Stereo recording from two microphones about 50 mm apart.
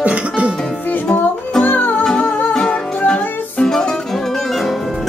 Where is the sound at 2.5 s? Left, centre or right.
Centre.